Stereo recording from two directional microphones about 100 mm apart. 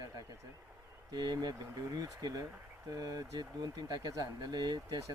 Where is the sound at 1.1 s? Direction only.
45° right (ahead or behind).